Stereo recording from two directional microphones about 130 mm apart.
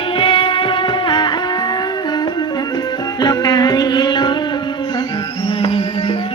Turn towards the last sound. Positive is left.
turn(degrees=45)  # may be behind; listen again after turning